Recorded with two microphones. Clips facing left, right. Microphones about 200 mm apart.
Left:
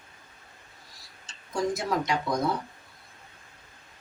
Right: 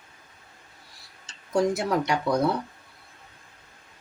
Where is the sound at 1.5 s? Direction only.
65° right (ahead or behind).